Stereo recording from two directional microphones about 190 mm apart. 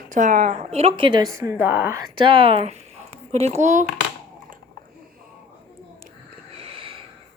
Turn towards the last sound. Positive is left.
turn(degrees=-30)  # may be behind; listen again after turning